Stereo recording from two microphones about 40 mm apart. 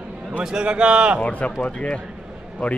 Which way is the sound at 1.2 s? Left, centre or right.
Left.